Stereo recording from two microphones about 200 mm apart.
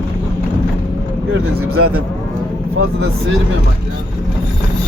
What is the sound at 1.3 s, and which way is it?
Speech, 90° right.